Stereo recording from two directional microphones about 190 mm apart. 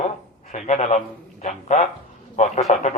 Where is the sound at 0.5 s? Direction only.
40° left (ahead or behind).